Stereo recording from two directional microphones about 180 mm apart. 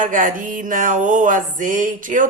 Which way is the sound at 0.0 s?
50° right (ahead or behind).